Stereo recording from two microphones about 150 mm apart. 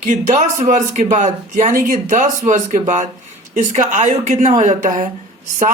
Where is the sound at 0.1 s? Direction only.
55° right (ahead or behind).